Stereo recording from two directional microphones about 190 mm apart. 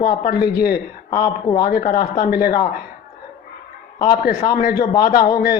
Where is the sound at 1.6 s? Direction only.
50° left (ahead or behind).